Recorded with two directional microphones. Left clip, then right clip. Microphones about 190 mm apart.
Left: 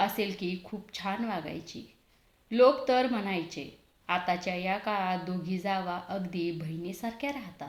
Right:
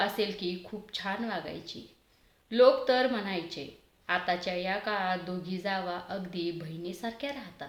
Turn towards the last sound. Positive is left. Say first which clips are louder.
# left 2 dB
turn(degrees=15)  # may be behind; listen again after turning